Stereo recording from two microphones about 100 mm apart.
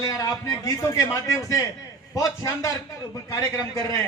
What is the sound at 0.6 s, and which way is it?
A man's voice, 30° left (ahead or behind).